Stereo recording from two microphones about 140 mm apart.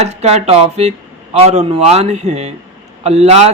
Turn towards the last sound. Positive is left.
turn(degrees=-50)  # may be behind; listen again after turning